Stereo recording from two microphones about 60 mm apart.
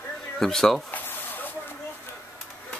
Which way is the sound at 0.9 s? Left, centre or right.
Left.